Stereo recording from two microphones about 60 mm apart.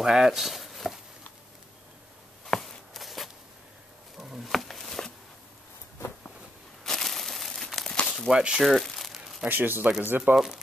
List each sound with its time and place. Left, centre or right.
0.0 s a sound: centre
2.4 s walk: centre
4.2 s a sound: centre
6.8 s crumpling: centre
8.3 s speech: centre
8.6 s crumpling: centre
9.5 s speech: right
10.3 s speech: centre